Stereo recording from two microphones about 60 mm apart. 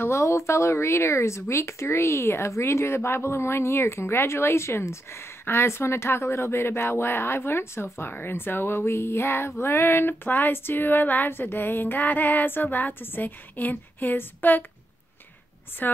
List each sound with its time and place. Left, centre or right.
0.0 s speech: left
9.6 s a sound: left
15.8 s a woman's voice: left